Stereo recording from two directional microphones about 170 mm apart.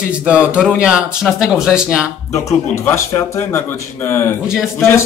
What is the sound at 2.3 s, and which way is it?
Speech, 15° left (ahead or behind).